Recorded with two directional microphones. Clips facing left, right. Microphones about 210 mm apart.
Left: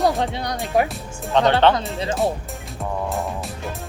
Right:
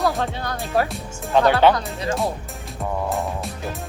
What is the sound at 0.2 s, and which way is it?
Speech, 15° left (ahead or behind).